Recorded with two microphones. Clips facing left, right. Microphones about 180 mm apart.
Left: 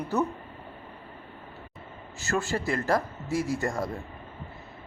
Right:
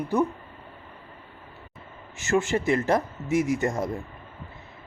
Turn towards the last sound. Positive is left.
turn(degrees=-20)  # may be behind; listen again after turning